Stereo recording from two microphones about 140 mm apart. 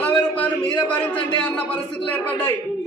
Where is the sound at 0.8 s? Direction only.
35° left (ahead or behind).